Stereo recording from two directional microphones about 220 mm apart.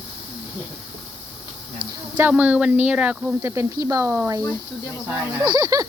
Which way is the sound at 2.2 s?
5° right (ahead or behind).